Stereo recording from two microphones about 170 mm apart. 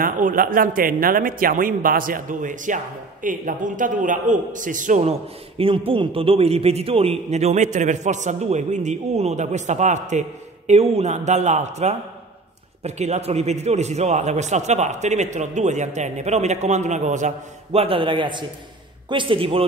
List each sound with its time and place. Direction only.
0.0 s a man's voice: 55° right (ahead or behind)
5.6 s a man's voice: 30° right (ahead or behind)
17.7 s a man's voice: 30° right (ahead or behind)